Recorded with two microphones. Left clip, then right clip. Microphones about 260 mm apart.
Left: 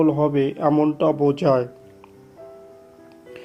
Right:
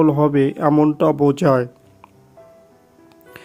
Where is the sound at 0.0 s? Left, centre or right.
Right.